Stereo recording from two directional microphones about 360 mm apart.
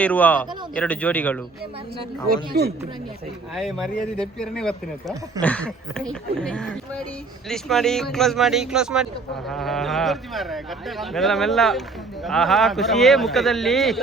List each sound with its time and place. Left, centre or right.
0.0 s speech: centre
2.3 s a man's voice: right
3.5 s speech: centre